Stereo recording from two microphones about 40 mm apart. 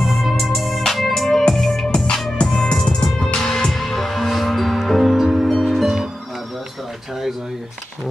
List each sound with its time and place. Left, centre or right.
0.0 s music: centre; by 3.3 s left
3.5 s music: centre